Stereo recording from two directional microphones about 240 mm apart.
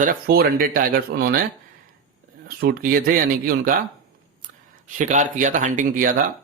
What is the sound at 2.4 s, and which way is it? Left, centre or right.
A man's voice, right.